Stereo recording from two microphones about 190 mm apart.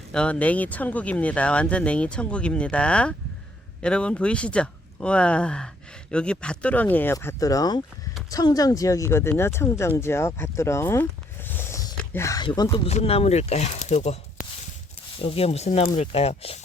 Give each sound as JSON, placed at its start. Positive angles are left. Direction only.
{"t": 0.1, "sound": "speech", "side_deg": 5}
{"t": 11.4, "sound": "a sound", "side_deg": 10}
{"t": 11.9, "sound": "speech", "side_deg": 15}